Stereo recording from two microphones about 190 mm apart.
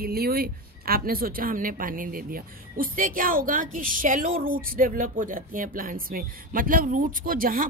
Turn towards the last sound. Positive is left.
turn(degrees=-45)  # may be behind; listen again after turning